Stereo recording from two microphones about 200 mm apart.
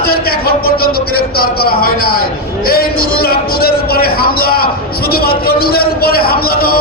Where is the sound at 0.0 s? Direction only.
50° left (ahead or behind).